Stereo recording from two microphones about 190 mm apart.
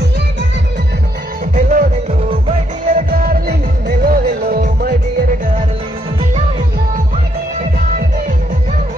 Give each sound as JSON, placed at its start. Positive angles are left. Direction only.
{"t": 1.5, "sound": "music", "side_deg": -45}
{"t": 2.9, "sound": "music", "side_deg": -50}